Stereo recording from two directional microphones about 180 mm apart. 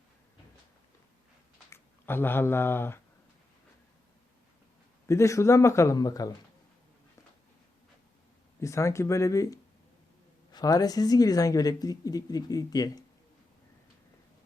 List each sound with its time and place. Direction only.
1.7 s speech: 10° left (ahead or behind)
5.0 s a man's voice: 15° left (ahead or behind)
8.6 s a man's voice: 15° left (ahead or behind)